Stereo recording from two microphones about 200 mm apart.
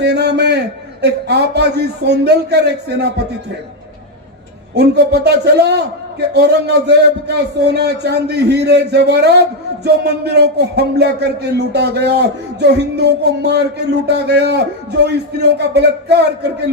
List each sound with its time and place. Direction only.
0.0 s a sound: 55° right (ahead or behind)
1.0 s a man's voice: 55° right (ahead or behind)
4.7 s a man's voice: 55° right (ahead or behind)